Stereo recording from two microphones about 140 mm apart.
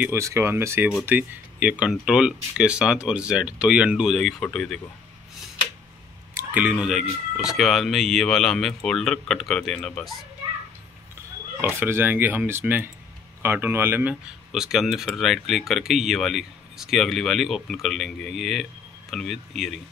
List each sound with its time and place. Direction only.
0.0 s speech: 20° right (ahead or behind); by 4.7 s 5° left (ahead or behind)
6.3 s speech: 10° right (ahead or behind); by 10.1 s 5° left (ahead or behind)
11.6 s speech: 15° right (ahead or behind)
14.5 s speech: centre (ahead or behind)